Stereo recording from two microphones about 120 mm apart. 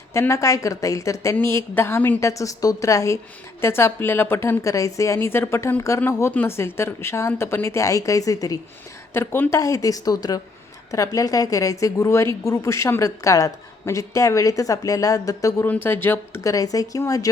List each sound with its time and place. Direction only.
0.1 s a woman's voice: 25° left (ahead or behind)
9.1 s a woman's voice: 20° left (ahead or behind)
15.6 s a woman's voice: 15° left (ahead or behind)